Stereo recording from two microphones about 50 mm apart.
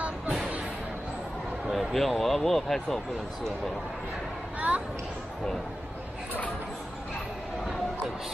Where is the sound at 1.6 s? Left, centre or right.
Centre.